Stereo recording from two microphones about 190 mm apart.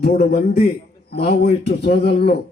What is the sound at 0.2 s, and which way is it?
Speech, 55° left (ahead or behind).